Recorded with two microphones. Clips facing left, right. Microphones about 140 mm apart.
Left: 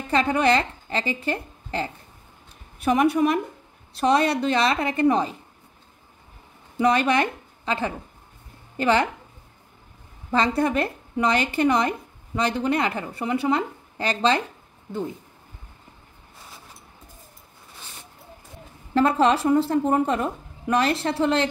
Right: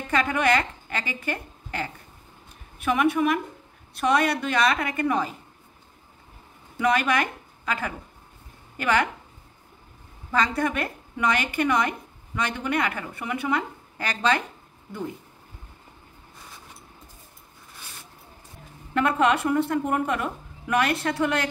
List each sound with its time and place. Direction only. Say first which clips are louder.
0.1 s a woman's voice: left 3 dB; 30° left (ahead or behind)
6.8 s a woman's voice: left 3 dB; 30° left (ahead or behind)
10.3 s a woman's voice: left 3 dB; 30° left (ahead or behind)
18.9 s a woman's voice: left 3 dB; 30° left (ahead or behind)